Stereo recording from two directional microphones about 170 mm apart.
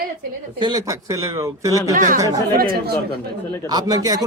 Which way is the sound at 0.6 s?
20° right (ahead or behind).